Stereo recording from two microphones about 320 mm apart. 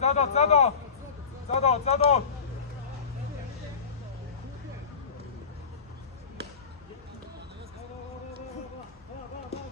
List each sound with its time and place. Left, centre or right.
0.0 s speech: left